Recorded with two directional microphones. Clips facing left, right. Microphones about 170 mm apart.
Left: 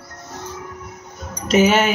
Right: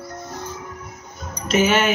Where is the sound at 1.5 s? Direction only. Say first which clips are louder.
Left 3 dB; 40° left (ahead or behind).